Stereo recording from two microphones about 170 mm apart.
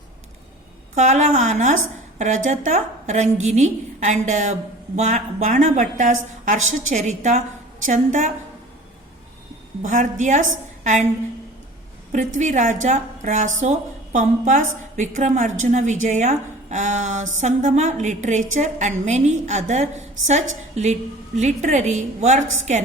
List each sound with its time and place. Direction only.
0.9 s a woman's voice: 45° right (ahead or behind)
9.8 s a woman's voice: 50° right (ahead or behind)
12.1 s a woman's voice: 45° right (ahead or behind)